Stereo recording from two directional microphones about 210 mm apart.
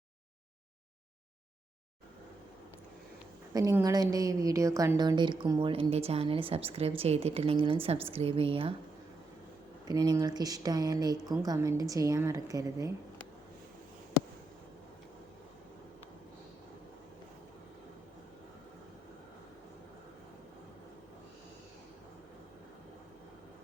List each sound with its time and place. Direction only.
3.5 s a woman's voice: 15° right (ahead or behind)
9.8 s speech: 20° right (ahead or behind)